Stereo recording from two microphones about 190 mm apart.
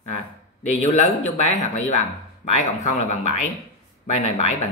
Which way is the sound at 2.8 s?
35° left (ahead or behind).